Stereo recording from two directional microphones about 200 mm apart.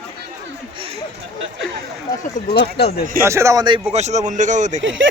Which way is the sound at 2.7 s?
55° left (ahead or behind).